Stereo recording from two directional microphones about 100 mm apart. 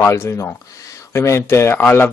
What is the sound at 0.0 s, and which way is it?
Speech, 25° left (ahead or behind).